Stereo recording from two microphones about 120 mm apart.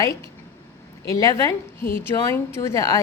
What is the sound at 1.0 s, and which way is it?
A woman's voice, 25° left (ahead or behind).